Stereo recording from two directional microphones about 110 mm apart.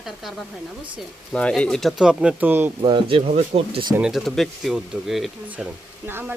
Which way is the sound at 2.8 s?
50° right (ahead or behind).